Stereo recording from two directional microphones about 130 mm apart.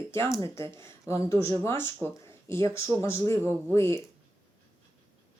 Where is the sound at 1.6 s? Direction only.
20° left (ahead or behind).